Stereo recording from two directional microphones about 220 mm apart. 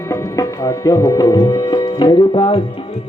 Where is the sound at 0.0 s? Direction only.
15° left (ahead or behind).